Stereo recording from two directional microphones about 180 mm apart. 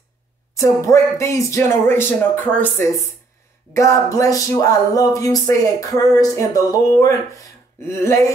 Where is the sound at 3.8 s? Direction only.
15° left (ahead or behind).